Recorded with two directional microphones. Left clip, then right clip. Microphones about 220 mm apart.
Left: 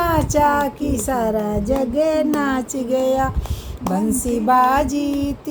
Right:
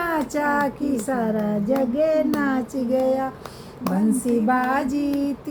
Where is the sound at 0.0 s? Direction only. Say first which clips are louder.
Left 6 dB; 40° left (ahead or behind).